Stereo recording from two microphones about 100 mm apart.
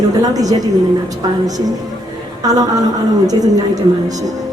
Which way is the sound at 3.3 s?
40° right (ahead or behind).